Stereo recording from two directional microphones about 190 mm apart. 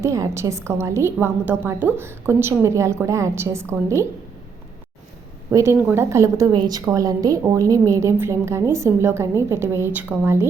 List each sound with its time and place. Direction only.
0.0 s a woman's voice: 15° right (ahead or behind)
5.5 s a woman's voice: 15° right (ahead or behind)